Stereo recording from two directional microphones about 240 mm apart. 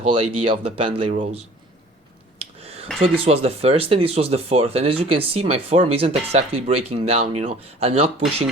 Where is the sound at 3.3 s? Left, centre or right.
Right.